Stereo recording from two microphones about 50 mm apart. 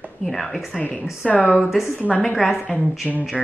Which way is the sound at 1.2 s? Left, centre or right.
Centre.